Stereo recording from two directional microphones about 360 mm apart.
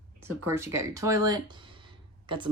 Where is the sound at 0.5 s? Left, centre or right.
Centre.